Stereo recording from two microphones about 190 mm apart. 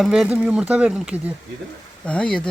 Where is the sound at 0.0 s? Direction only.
Centre (ahead or behind).